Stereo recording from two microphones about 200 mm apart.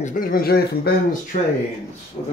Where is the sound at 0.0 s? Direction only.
40° left (ahead or behind).